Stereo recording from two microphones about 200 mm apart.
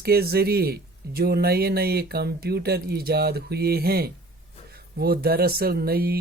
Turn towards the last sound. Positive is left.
turn(degrees=-50)  # may be behind; listen again after turning